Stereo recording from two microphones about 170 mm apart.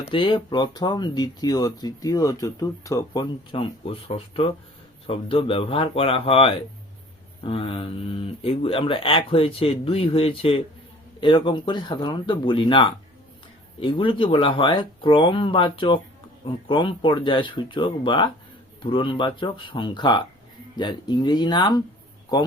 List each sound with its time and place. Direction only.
0.0 s speech: 30° left (ahead or behind)